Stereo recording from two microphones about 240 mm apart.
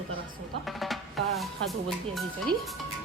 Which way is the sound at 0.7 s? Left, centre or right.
Centre.